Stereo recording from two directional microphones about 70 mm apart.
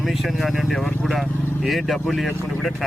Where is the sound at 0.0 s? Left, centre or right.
Centre.